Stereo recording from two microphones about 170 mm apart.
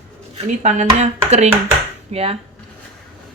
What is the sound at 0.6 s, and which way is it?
Speech, 45° right (ahead or behind).